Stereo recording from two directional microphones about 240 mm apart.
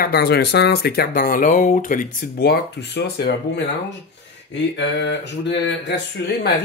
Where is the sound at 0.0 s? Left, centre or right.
Left.